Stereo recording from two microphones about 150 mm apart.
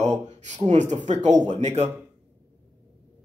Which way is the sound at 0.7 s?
50° right (ahead or behind).